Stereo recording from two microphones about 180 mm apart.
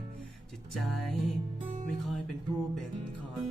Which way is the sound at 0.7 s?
Centre (ahead or behind).